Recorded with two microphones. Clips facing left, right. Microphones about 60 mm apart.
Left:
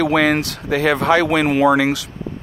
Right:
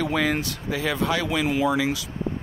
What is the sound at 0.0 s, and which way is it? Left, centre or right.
Speech, left.